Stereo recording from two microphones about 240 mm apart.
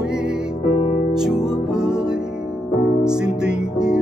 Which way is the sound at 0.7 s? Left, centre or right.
Left.